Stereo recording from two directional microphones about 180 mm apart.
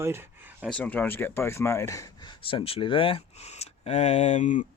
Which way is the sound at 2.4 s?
30° left (ahead or behind).